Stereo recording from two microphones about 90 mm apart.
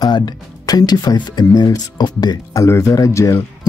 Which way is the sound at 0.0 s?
50° left (ahead or behind).